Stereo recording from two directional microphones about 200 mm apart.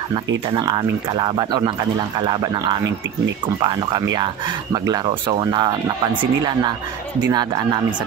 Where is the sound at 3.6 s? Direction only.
20° right (ahead or behind).